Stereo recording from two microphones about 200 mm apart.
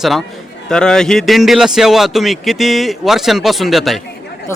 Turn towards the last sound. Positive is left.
turn(degrees=0)  # may be behind; listen again after turning